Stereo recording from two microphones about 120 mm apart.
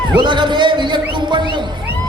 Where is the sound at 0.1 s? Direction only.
40° right (ahead or behind).